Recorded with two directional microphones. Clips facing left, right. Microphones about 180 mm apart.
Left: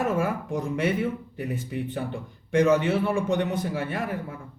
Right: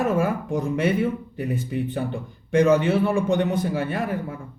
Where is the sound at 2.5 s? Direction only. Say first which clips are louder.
Right 3 dB; 30° right (ahead or behind).